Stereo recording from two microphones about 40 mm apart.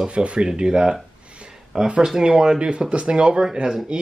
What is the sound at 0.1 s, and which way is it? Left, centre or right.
Speech, right.